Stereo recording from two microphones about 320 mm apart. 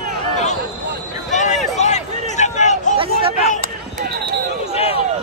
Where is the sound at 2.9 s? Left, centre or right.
Centre.